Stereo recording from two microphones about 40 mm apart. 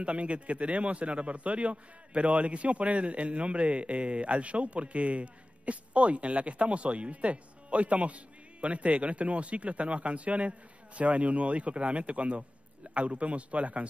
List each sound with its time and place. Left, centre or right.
0.0 s a man's voice: right